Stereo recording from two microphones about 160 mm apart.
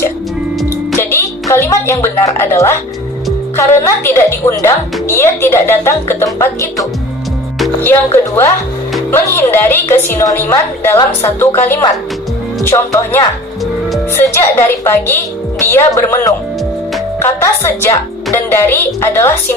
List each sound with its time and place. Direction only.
0.9 s music: 15° left (ahead or behind)
3.5 s a woman's voice: 20° left (ahead or behind)
7.8 s a woman's voice: 15° left (ahead or behind)
12.7 s a woman's voice: 15° left (ahead or behind)
14.3 s a woman's voice: 15° left (ahead or behind)